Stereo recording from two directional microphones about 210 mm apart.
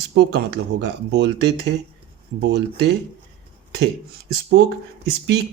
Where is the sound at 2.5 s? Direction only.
55° right (ahead or behind).